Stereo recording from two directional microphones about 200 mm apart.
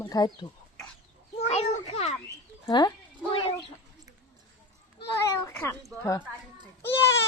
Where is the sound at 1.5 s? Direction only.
30° left (ahead or behind).